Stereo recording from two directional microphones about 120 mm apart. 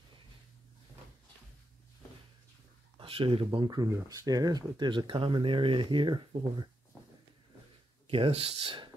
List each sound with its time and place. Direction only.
3.0 s speech: 50° right (ahead or behind)
8.1 s speech: 50° right (ahead or behind)